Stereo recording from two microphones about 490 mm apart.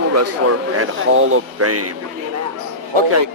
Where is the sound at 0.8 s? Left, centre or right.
Right.